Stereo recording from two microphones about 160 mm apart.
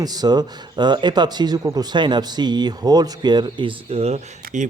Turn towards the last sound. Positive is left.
turn(degrees=-40)  # may be behind; listen again after turning